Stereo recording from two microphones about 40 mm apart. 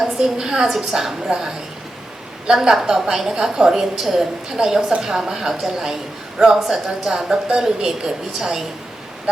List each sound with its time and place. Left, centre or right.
0.0 s a woman's voice: centre